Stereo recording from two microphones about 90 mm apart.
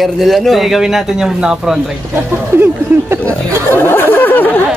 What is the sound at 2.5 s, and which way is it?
Speech, 25° right (ahead or behind).